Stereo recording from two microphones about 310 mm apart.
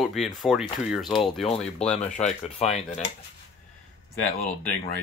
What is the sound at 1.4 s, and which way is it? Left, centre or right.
Speech, centre.